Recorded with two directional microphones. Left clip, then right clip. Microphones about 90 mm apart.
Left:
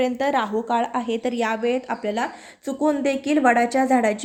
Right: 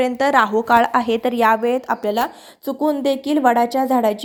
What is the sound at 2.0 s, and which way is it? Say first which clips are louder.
Speech: right 5 dB; 90° right.